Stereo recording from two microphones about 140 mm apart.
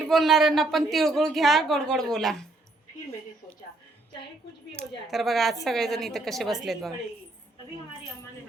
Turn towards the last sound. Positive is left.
turn(degrees=0)  # may be behind; listen again after turning